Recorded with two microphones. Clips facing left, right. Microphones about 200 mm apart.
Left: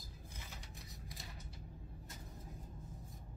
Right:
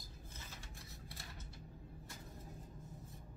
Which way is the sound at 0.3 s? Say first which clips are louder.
Left 1 dB; 15° left (ahead or behind).